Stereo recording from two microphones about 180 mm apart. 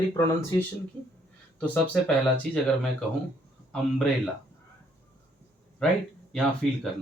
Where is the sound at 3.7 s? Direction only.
5° left (ahead or behind).